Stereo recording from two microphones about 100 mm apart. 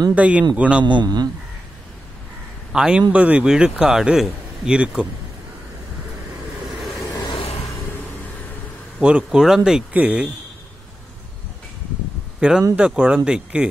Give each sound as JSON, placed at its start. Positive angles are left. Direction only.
{"t": 0.1, "sound": "a man's voice", "side_deg": -15}
{"t": 0.8, "sound": "a man's voice", "side_deg": -45}
{"t": 2.7, "sound": "a man's voice", "side_deg": -10}
{"t": 7.1, "sound": "vehicle", "side_deg": 40}
{"t": 7.3, "sound": "a sound", "side_deg": 85}
{"t": 9.0, "sound": "a man's voice", "side_deg": -10}
{"t": 12.4, "sound": "a man's voice", "side_deg": -10}